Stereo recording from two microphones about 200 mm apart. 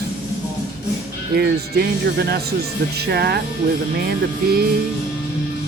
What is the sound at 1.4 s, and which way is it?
Speech, 55° right (ahead or behind).